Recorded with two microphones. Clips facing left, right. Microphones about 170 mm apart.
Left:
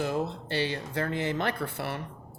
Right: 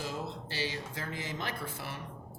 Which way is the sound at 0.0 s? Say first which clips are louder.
Left 8 dB; 60° left (ahead or behind).